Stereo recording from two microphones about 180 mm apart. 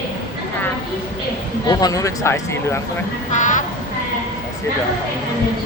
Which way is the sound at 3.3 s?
45° left (ahead or behind).